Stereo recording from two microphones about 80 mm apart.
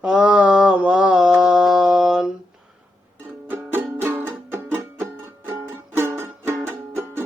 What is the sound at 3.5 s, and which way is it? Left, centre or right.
Music, right.